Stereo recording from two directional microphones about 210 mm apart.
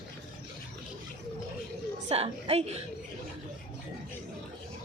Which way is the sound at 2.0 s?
30° right (ahead or behind).